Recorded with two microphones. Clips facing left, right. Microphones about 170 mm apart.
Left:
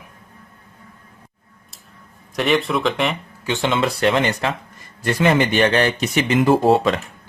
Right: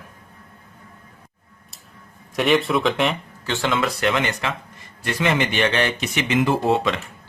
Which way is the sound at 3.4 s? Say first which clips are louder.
Left 3 dB; 15° left (ahead or behind).